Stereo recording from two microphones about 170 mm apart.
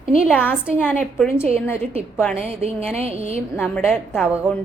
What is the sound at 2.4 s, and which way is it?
A woman's voice, 35° right (ahead or behind).